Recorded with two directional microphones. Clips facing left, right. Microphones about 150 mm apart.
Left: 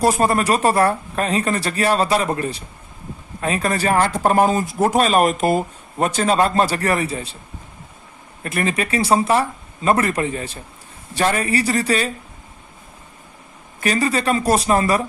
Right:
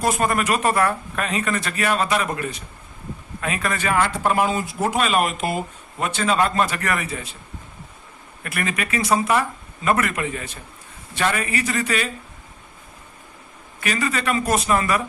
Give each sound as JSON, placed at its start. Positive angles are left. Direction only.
{"t": 0.0, "sound": "speech", "side_deg": 35}
{"t": 8.4, "sound": "speech", "side_deg": 30}
{"t": 13.8, "sound": "speech", "side_deg": 35}